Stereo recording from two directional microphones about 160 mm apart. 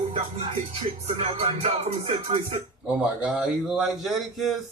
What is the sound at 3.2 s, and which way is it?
Speech, 5° right (ahead or behind).